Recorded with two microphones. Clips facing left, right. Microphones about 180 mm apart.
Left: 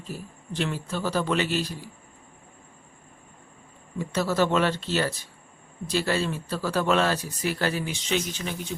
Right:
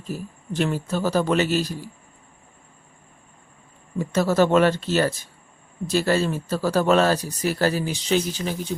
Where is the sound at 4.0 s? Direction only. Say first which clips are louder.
Right 5 dB; 45° right (ahead or behind).